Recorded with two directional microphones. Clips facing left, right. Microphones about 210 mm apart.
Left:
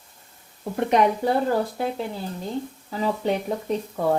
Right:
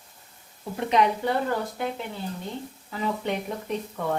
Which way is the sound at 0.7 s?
50° left (ahead or behind).